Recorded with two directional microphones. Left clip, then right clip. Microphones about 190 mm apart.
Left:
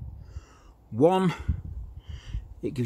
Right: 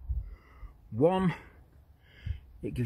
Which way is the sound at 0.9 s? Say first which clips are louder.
Left 5 dB; 10° left (ahead or behind).